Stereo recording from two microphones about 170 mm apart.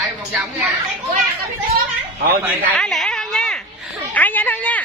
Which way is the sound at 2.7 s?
5° left (ahead or behind).